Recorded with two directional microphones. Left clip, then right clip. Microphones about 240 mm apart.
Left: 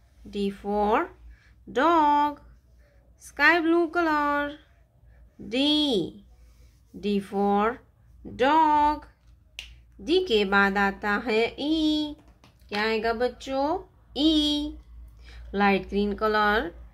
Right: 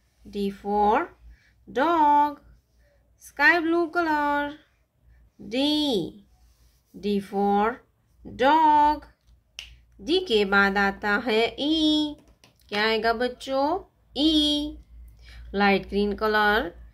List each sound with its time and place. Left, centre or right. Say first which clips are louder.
0.3 s speech: right 1 dB; centre